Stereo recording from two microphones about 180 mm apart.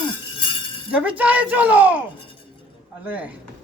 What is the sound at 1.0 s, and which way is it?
Speech, 10° right (ahead or behind).